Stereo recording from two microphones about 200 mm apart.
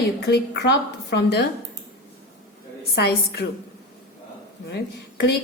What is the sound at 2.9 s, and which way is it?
Speech, 50° left (ahead or behind).